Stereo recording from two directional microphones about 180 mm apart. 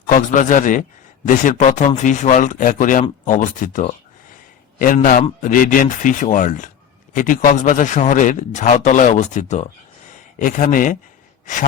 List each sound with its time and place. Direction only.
0.1 s speech: 45° left (ahead or behind)
5.4 s speech: 50° left (ahead or behind)